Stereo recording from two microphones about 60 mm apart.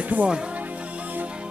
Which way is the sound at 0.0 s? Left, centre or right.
Right.